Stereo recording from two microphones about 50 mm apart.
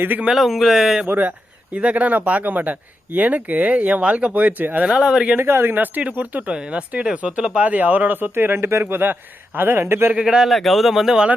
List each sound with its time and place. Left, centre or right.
0.3 s speech: centre
1.0 s speech: right
1.7 s speech: right
4.9 s speech: centre
5.4 s speech: right
5.8 s speech: right
10.2 s speech: centre
10.5 s speech: centre